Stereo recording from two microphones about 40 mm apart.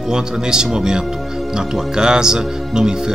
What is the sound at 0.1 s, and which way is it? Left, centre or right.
Speech, centre.